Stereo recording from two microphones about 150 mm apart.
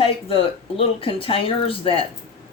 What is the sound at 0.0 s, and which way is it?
Speech, 35° left (ahead or behind).